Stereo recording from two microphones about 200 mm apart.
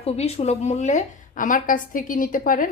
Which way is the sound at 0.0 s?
30° left (ahead or behind).